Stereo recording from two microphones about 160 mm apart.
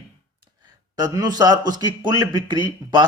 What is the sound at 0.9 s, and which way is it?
A man's voice, 25° right (ahead or behind).